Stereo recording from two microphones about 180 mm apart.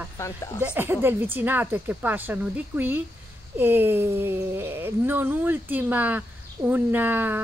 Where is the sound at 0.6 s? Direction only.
10° right (ahead or behind).